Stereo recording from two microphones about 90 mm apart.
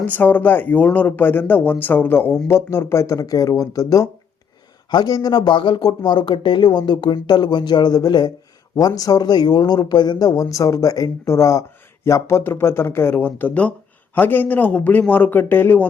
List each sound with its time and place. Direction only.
0.1 s speech: 20° left (ahead or behind)